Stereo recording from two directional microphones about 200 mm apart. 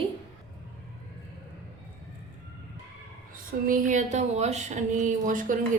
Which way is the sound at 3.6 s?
40° right (ahead or behind).